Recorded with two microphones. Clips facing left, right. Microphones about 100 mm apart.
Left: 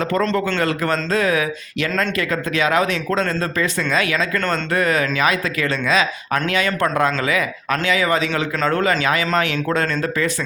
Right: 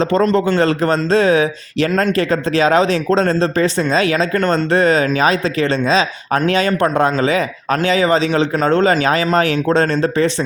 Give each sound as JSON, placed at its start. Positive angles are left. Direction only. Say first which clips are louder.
{"t": 0.0, "sound": "speech", "louder": "right 5 dB", "side_deg": -25}